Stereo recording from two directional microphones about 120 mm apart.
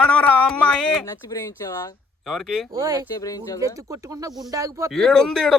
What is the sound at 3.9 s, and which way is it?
Speech, 30° right (ahead or behind).